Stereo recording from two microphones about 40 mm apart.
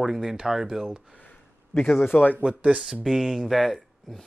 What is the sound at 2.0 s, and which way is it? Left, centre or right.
Speech, left.